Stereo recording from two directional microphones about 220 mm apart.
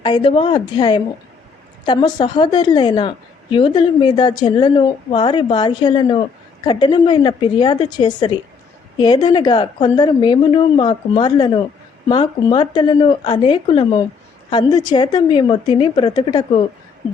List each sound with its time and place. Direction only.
0.0 s speech: 25° left (ahead or behind)